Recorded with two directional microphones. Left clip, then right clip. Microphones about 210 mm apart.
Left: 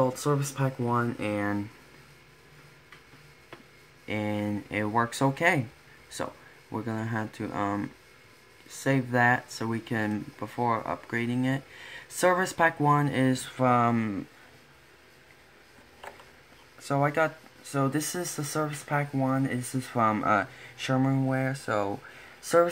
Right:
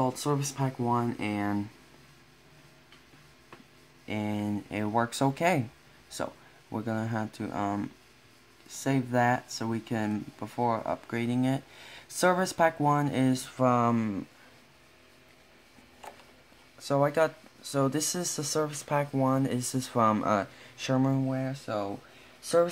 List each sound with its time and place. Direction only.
0.0 s speech: 5° right (ahead or behind)
4.0 s speech: centre (ahead or behind)
16.9 s speech: 5° right (ahead or behind)
21.3 s speech: 15° left (ahead or behind)